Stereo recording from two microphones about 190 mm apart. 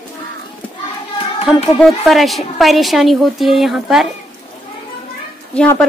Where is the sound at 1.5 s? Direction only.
5° right (ahead or behind).